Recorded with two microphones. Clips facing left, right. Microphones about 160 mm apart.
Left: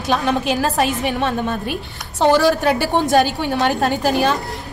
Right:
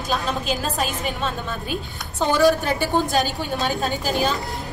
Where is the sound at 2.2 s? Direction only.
75° left (ahead or behind).